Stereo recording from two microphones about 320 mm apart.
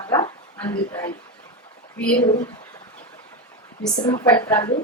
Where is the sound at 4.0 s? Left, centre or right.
Centre.